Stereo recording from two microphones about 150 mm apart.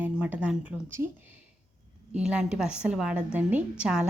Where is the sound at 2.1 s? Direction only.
5° right (ahead or behind).